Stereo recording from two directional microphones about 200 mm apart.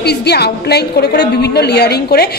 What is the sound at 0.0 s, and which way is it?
A woman's voice, 55° left (ahead or behind).